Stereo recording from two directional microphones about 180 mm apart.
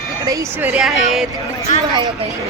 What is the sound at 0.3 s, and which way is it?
Speech, 15° right (ahead or behind).